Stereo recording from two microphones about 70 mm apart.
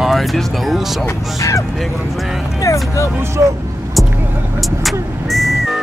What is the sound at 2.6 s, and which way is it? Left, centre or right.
Speech, left.